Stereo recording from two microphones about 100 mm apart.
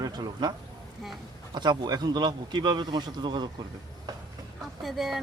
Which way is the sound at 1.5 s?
45° right (ahead or behind).